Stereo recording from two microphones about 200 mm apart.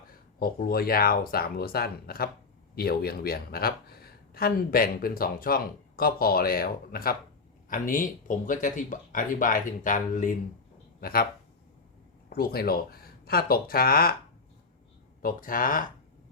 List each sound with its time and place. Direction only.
0.3 s speech: 50° left (ahead or behind)
12.3 s speech: 50° left (ahead or behind)
15.2 s speech: 45° left (ahead or behind)